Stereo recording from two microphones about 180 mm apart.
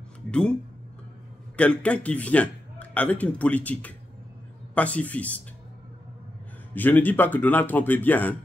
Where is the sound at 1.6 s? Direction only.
5° left (ahead or behind).